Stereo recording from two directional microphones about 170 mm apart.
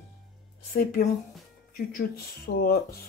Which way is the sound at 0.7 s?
60° left (ahead or behind).